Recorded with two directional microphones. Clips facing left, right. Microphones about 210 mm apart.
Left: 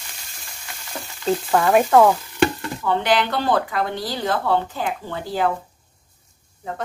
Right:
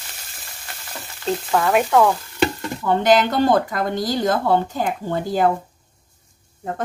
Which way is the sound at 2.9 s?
45° right (ahead or behind).